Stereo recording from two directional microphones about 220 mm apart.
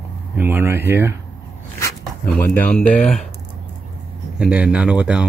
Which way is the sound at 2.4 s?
10° left (ahead or behind).